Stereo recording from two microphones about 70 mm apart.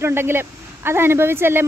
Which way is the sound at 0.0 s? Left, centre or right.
Right.